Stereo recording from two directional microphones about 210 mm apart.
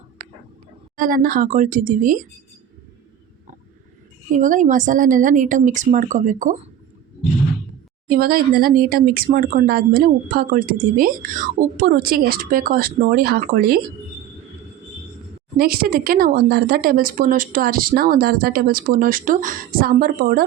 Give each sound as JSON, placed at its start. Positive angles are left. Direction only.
{"t": 0.9, "sound": "a woman's voice", "side_deg": -40}
{"t": 4.3, "sound": "a woman's voice", "side_deg": -40}
{"t": 8.0, "sound": "speech", "side_deg": -45}
{"t": 15.5, "sound": "speech", "side_deg": -45}